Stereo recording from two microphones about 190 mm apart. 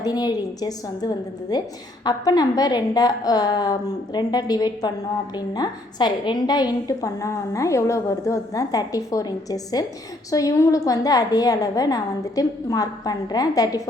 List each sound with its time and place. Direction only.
0.0 s a woman's voice: 20° left (ahead or behind)